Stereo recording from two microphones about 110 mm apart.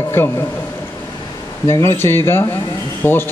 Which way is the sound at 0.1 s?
20° left (ahead or behind).